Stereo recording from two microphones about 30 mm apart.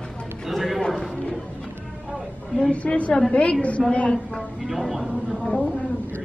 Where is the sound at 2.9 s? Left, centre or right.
Left.